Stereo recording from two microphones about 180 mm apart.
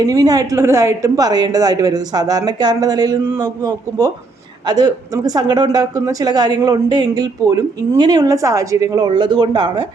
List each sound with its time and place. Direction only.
0.1 s speech: 20° right (ahead or behind)